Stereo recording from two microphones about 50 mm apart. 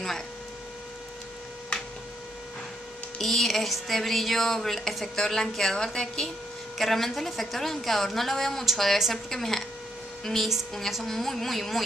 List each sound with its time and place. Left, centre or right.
3.2 s speech: centre